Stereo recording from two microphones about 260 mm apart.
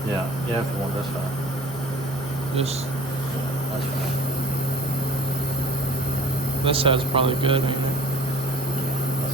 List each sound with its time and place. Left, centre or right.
6.7 s a man's voice: right